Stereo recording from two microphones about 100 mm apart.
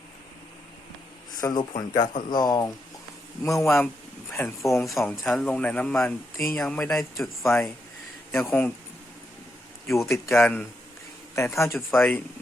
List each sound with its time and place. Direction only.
1.4 s speech: 35° left (ahead or behind)
3.4 s speech: 30° left (ahead or behind)
4.8 s speech: centre (ahead or behind); by 6.5 s 20° left (ahead or behind)
6.5 s speech: 10° left (ahead or behind)
7.2 s speech: 25° left (ahead or behind)
9.9 s speech: 30° left (ahead or behind)
10.4 s speech: 15° left (ahead or behind)
11.3 s speech: 25° left (ahead or behind)